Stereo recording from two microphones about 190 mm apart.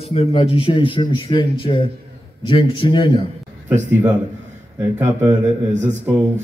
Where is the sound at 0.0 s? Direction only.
30° left (ahead or behind).